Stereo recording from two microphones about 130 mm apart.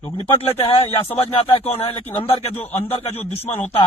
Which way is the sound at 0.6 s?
50° left (ahead or behind).